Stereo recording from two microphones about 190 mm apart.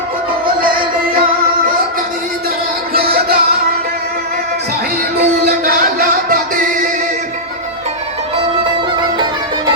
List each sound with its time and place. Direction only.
2.9 s music: 55° right (ahead or behind)
5.1 s music: 50° right (ahead or behind)